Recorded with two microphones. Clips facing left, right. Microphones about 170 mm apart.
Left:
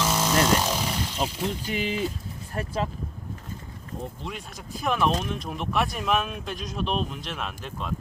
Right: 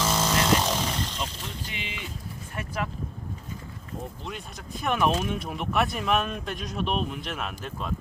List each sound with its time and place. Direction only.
0.0 s chainsaw: 10° left (ahead or behind)
1.7 s speech: 40° left (ahead or behind)
2.6 s speech: 25° left (ahead or behind)
4.3 s speech: centre (ahead or behind)